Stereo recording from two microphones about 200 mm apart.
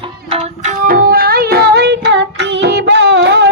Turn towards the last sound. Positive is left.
turn(degrees=-60)  # may be behind; listen again after turning